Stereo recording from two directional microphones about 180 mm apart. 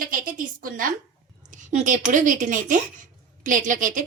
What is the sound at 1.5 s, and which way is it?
A woman's voice, 45° right (ahead or behind).